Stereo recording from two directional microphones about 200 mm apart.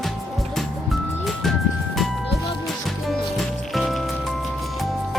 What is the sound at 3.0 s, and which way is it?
Music, centre (ahead or behind).